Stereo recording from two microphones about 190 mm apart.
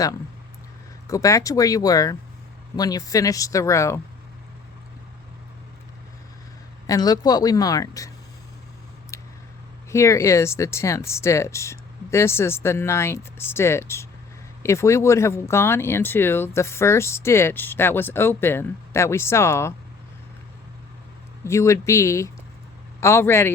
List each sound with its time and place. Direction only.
1.0 s speech: 15° left (ahead or behind)
6.8 s speech: 20° left (ahead or behind)
9.9 s speech: 15° left (ahead or behind)
21.4 s speech: 15° left (ahead or behind)